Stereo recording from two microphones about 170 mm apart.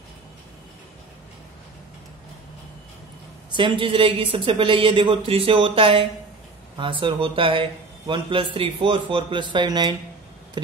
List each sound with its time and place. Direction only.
3.5 s speech: 30° right (ahead or behind)